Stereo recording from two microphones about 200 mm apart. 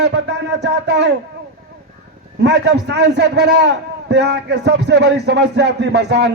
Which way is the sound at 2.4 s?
60° right (ahead or behind).